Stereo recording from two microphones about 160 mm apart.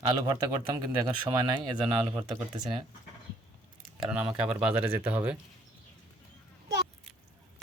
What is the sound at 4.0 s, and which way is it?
Speech, 5° right (ahead or behind).